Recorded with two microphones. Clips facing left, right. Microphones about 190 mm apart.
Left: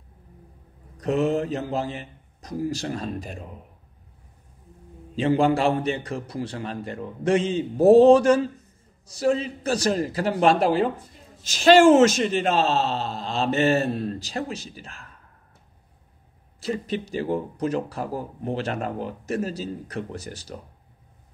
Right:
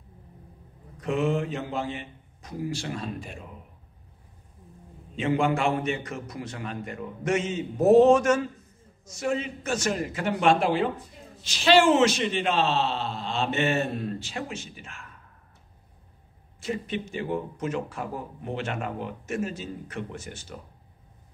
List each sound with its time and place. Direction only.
0.9 s speech: 40° left (ahead or behind)
5.1 s speech: 35° left (ahead or behind)
16.5 s speech: 35° left (ahead or behind)